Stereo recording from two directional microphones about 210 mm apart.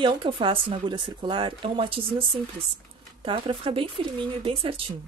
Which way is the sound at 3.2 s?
25° right (ahead or behind).